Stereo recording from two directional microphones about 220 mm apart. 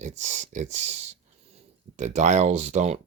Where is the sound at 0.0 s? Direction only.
35° right (ahead or behind).